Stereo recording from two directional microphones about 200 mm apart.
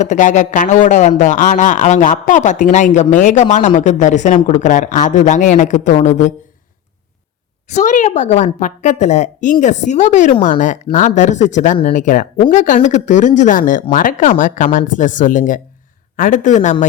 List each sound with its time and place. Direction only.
0.0 s a man's voice: 35° left (ahead or behind)
7.8 s a man's voice: 35° left (ahead or behind)